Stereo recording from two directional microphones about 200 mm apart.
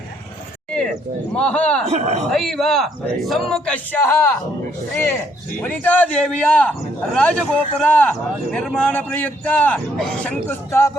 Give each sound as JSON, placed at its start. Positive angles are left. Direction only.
{"t": 1.4, "sound": "a man's voice", "side_deg": 5}
{"t": 1.9, "sound": "a man's voice", "side_deg": -35}
{"t": 2.3, "sound": "a man's voice", "side_deg": 0}
{"t": 5.6, "sound": "a man's voice", "side_deg": 10}